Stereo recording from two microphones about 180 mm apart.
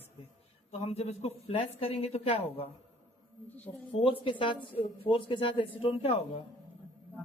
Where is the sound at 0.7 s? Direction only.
35° left (ahead or behind).